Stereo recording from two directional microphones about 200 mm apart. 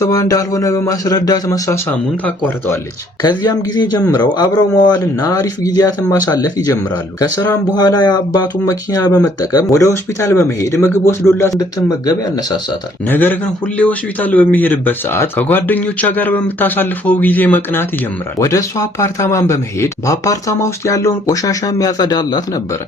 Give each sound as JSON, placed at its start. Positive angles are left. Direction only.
{"t": 0.0, "sound": "speech", "side_deg": 15}
{"t": 3.2, "sound": "speech", "side_deg": 20}